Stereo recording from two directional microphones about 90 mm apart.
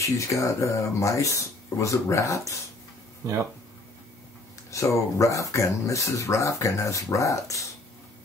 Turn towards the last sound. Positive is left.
turn(degrees=35)  # may be behind; listen again after turning